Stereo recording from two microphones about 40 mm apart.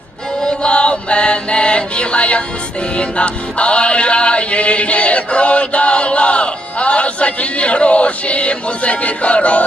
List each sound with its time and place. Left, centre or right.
0.4 s chant: left
2.9 s music: left